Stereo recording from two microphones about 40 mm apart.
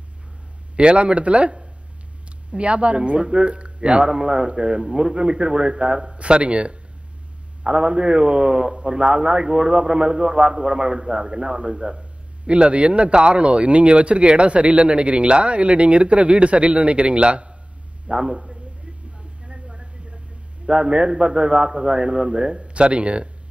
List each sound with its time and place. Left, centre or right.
0.7 s speech: right
19.1 s a sound: right
20.6 s speech: right